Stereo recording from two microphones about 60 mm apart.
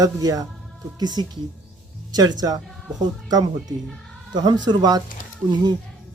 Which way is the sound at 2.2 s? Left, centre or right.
Right.